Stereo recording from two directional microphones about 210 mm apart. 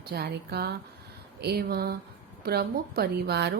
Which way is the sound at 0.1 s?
50° right (ahead or behind).